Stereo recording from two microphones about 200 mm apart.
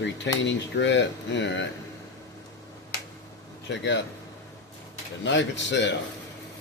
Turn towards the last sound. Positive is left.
turn(degrees=65)  # may be behind; listen again after turning